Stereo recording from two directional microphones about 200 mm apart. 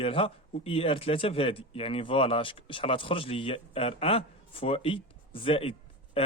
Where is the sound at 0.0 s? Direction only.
25° left (ahead or behind).